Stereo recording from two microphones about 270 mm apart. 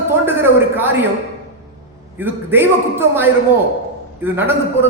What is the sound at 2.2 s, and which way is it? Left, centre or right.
A man's voice, centre.